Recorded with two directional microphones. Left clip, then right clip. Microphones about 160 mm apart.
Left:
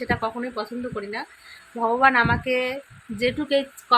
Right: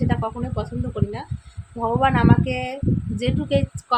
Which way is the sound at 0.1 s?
15° right (ahead or behind).